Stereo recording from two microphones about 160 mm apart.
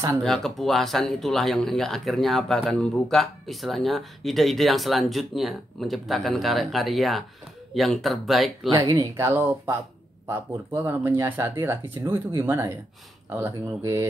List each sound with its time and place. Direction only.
0.2 s speech: centre (ahead or behind)
8.7 s speech: 25° right (ahead or behind)
9.1 s speech: 15° right (ahead or behind)